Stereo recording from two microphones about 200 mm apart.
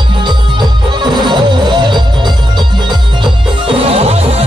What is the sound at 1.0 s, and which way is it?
Music, 20° right (ahead or behind).